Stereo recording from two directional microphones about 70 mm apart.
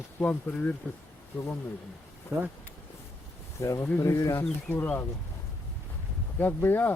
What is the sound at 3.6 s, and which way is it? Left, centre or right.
Speech, left.